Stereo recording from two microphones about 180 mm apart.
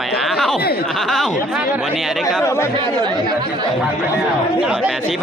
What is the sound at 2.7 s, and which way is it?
Speech, 25° right (ahead or behind).